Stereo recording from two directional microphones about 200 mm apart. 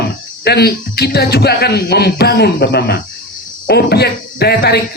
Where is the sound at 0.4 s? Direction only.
55° left (ahead or behind).